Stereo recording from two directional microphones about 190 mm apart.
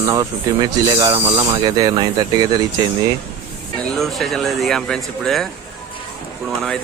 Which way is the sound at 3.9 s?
Centre (ahead or behind).